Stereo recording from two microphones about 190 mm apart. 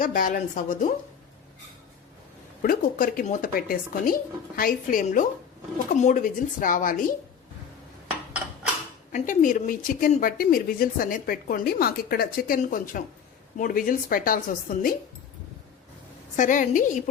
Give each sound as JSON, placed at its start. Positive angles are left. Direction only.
{"t": 0.0, "sound": "speech", "side_deg": 45}
{"t": 2.6, "sound": "speech", "side_deg": 45}
{"t": 9.1, "sound": "speech", "side_deg": 45}
{"t": 16.3, "sound": "a woman's voice", "side_deg": 40}